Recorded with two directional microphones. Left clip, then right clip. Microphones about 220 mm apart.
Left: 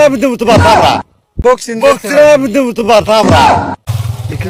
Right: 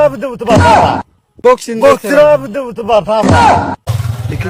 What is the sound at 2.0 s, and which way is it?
Speech, 45° right (ahead or behind).